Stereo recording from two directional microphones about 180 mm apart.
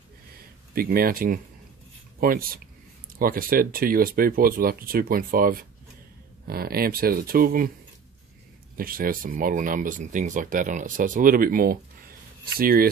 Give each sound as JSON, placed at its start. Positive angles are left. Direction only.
{"t": 0.7, "sound": "speech", "side_deg": -55}
{"t": 8.7, "sound": "speech", "side_deg": -50}